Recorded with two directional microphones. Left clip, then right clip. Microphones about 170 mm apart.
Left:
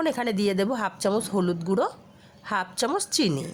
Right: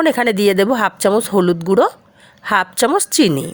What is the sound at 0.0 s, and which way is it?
A woman's voice, 45° right (ahead or behind).